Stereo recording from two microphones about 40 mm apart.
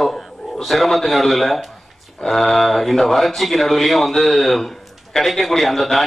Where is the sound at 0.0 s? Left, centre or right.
Centre.